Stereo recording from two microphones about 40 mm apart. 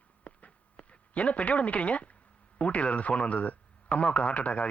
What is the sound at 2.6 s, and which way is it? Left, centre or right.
A man's voice, left.